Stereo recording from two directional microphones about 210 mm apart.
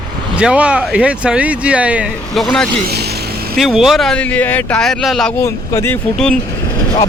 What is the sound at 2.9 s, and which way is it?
Vehicle, 50° right (ahead or behind).